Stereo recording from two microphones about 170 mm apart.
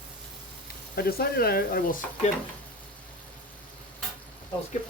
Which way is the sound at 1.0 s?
65° left (ahead or behind).